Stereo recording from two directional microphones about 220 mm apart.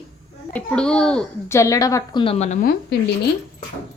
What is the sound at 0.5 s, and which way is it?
Speech, 5° left (ahead or behind).